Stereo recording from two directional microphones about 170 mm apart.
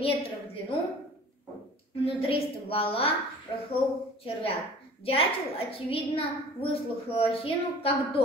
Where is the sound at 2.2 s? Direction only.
35° left (ahead or behind).